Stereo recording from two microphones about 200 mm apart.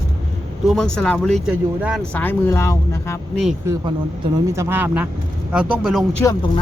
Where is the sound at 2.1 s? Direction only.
10° left (ahead or behind).